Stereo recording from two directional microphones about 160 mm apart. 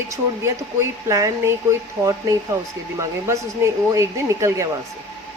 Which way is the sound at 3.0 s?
20° right (ahead or behind).